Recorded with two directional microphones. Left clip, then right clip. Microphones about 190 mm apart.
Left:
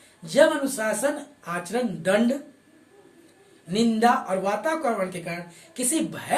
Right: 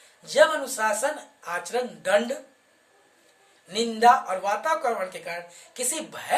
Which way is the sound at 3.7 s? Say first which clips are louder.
Right 2 dB; 15° right (ahead or behind).